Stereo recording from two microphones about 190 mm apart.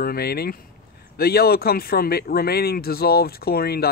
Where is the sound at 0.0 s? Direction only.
55° left (ahead or behind).